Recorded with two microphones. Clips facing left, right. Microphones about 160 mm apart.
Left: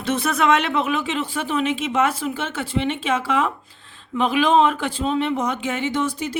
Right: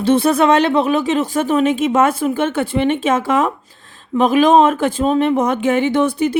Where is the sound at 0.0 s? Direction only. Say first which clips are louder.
Right 8 dB; 30° right (ahead or behind).